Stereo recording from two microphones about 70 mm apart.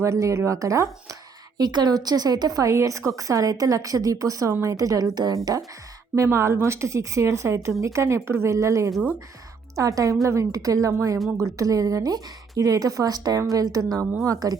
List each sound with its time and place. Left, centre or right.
0.0 s a woman's voice: right
1.5 s a woman's voice: right
2.7 s a woman's voice: right
6.2 s a woman's voice: right